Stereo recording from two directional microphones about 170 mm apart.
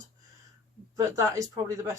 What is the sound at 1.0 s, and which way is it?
Speech, 20° right (ahead or behind).